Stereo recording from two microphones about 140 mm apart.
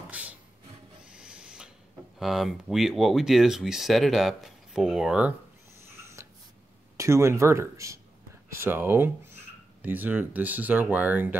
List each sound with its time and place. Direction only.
0.1 s music: 10° right (ahead or behind)
1.1 s owl: 5° right (ahead or behind)
2.1 s speech: centre (ahead or behind)
5.9 s a sound: 20° right (ahead or behind)
7.0 s speech: 20° right (ahead or behind)